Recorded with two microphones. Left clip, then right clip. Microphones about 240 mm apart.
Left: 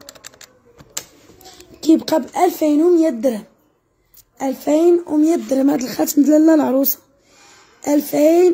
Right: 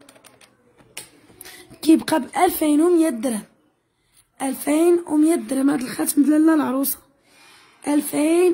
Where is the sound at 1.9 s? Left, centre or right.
Right.